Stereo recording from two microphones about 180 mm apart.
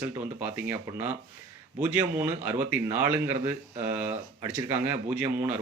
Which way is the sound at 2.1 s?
10° right (ahead or behind).